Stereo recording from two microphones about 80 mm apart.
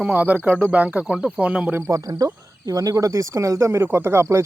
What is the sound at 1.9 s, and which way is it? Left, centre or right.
Speech, right.